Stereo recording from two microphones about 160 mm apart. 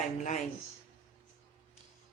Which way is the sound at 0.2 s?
50° left (ahead or behind).